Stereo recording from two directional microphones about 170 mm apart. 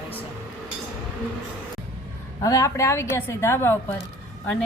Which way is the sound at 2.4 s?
20° left (ahead or behind).